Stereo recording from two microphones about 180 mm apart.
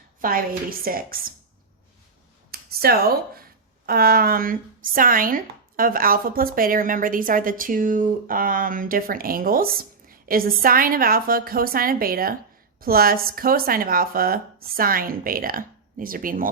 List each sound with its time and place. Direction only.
0.2 s speech: 50° right (ahead or behind)
2.5 s speech: 55° right (ahead or behind)